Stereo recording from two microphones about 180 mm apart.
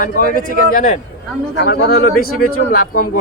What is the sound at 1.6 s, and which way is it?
A man's voice, 65° left (ahead or behind).